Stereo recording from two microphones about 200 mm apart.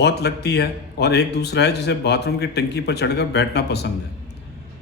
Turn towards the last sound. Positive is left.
turn(degrees=55)  # may be behind; listen again after turning